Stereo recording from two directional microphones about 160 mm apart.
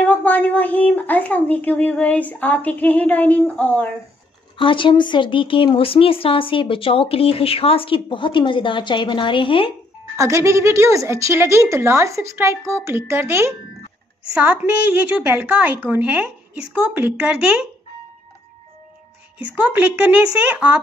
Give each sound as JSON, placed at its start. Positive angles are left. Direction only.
{"t": 0.0, "sound": "speech", "side_deg": 10}
{"t": 4.6, "sound": "speech", "side_deg": 30}
{"t": 10.1, "sound": "a woman's voice", "side_deg": -20}
{"t": 19.5, "sound": "a woman's voice", "side_deg": -10}